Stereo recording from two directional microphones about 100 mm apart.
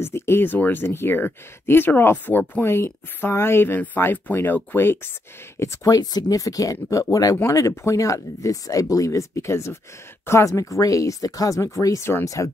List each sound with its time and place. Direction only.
0.0 s speech: 25° left (ahead or behind)
5.6 s speech: 35° left (ahead or behind)